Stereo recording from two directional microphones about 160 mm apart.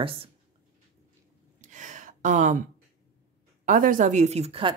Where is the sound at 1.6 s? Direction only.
50° right (ahead or behind).